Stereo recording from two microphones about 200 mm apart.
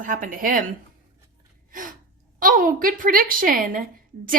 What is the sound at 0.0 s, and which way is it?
Speech, 45° right (ahead or behind).